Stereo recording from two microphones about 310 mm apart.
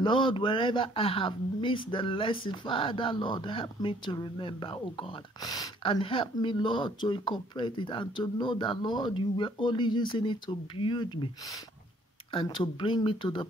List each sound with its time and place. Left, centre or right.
0.0 s speech: centre
12.3 s speech: centre